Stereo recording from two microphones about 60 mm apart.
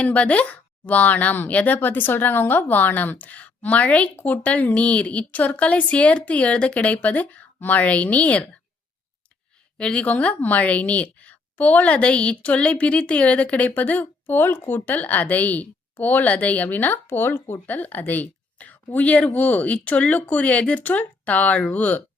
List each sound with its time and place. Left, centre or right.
0.0 s a woman's voice: left
9.7 s a woman's voice: centre